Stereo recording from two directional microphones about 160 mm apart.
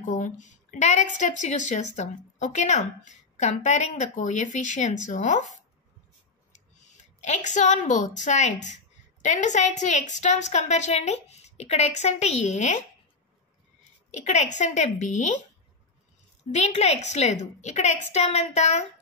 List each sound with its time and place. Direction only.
0.0 s a woman's voice: 50° left (ahead or behind)
14.1 s a woman's voice: 45° left (ahead or behind)
16.5 s a woman's voice: 45° left (ahead or behind)